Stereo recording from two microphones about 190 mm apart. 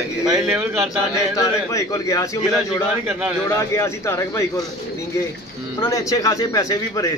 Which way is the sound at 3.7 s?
15° left (ahead or behind).